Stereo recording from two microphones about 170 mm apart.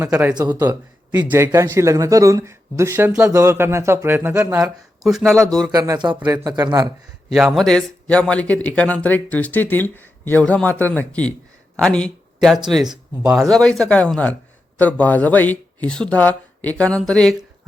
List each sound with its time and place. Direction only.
0.0 s speech: 15° right (ahead or behind)
0.3 s speech: 25° right (ahead or behind)
0.7 s speech: 10° right (ahead or behind)
4.6 s speech: centre (ahead or behind)
5.7 s speech: 20° right (ahead or behind)
7.3 s speech: centre (ahead or behind)